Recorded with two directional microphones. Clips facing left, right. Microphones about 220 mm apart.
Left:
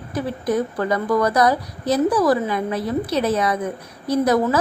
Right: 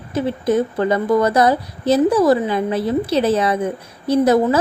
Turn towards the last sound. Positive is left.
turn(degrees=-25)  # may be behind; listen again after turning